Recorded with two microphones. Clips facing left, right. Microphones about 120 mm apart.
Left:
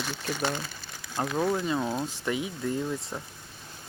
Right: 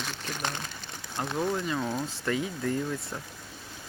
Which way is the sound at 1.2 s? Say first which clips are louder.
Left 2 dB; 25° left (ahead or behind).